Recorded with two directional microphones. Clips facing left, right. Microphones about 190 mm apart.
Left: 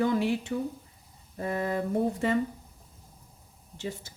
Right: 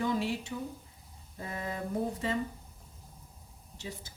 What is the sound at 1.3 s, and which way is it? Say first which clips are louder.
Speech: left 8 dB; 60° left (ahead or behind).